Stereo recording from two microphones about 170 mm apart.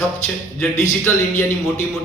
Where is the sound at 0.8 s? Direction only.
15° left (ahead or behind).